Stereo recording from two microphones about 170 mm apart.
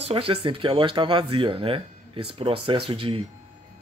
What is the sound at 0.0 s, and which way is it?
Speech, 35° right (ahead or behind).